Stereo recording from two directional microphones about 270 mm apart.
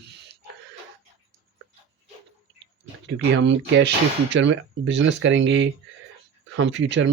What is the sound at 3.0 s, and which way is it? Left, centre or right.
Speech, right.